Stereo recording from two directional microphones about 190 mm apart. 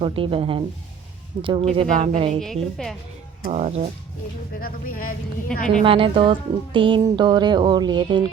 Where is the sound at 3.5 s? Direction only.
35° right (ahead or behind).